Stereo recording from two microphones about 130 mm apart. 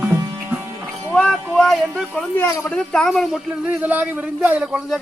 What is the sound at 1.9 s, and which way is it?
Speech, centre (ahead or behind).